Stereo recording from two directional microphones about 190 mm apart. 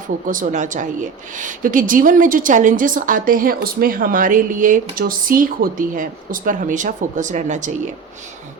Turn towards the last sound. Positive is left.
turn(degrees=-40)  # may be behind; listen again after turning